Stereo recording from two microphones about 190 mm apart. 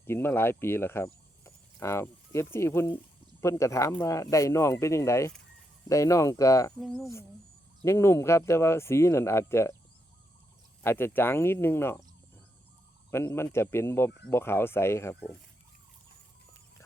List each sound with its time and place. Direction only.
0.0 s speech: 10° left (ahead or behind)
6.7 s speech: centre (ahead or behind)
7.8 s speech: 15° left (ahead or behind)
10.8 s speech: 10° left (ahead or behind)
13.1 s speech: 10° left (ahead or behind)